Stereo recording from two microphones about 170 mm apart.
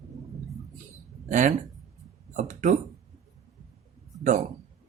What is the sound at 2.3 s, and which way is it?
Speech, 45° right (ahead or behind).